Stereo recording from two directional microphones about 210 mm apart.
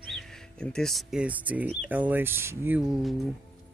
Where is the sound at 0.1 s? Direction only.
Centre (ahead or behind).